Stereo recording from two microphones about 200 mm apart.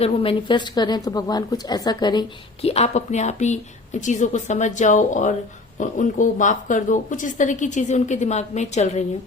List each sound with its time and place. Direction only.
0.0 s a woman's voice: 30° left (ahead or behind)